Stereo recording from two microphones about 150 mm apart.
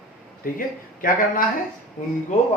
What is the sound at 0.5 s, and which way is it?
Speech, 70° left (ahead or behind).